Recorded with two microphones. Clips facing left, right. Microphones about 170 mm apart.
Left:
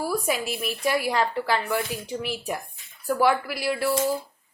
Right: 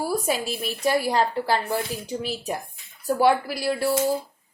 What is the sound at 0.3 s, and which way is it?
A woman's voice, 35° right (ahead or behind).